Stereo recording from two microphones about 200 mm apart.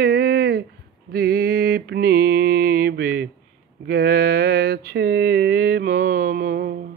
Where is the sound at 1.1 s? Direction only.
50° right (ahead or behind).